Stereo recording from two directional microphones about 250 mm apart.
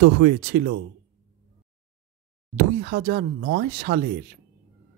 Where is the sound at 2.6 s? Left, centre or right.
Right.